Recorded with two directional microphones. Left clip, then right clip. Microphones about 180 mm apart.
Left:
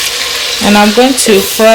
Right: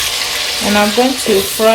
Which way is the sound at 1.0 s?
45° left (ahead or behind).